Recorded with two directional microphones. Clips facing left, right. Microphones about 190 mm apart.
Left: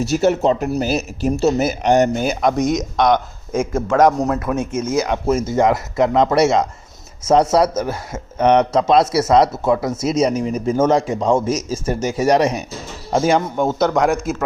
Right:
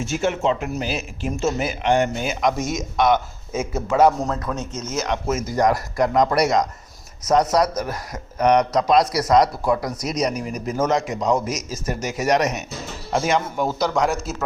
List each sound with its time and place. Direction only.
0.0 s speech: 40° left (ahead or behind)
2.6 s speech: 15° left (ahead or behind)
3.6 s speech: 10° right (ahead or behind)
4.2 s speech: 15° left (ahead or behind)
5.1 s a man's voice: 30° left (ahead or behind)
13.7 s speech: centre (ahead or behind)